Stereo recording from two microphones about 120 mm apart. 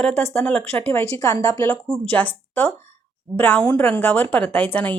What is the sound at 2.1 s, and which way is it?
Speech, 15° left (ahead or behind).